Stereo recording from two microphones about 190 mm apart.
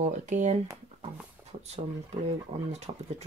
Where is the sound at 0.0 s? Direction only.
40° right (ahead or behind).